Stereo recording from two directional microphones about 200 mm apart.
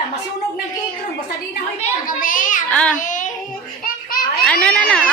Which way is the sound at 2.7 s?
5° left (ahead or behind).